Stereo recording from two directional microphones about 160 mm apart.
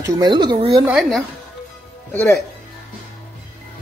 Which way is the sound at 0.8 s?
5° right (ahead or behind).